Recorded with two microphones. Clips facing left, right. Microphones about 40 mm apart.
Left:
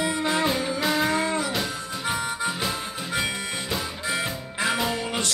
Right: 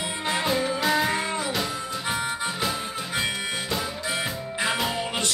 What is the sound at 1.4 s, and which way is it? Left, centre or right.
Harmonica, centre.